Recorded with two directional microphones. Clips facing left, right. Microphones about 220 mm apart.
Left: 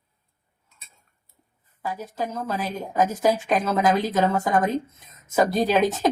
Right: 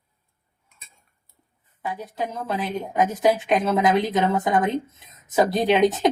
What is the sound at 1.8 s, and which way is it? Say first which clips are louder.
A woman's voice: even; 15° right (ahead or behind).